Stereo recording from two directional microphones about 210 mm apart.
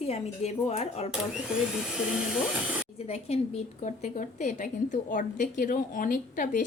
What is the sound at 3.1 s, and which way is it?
A woman's voice, 30° left (ahead or behind).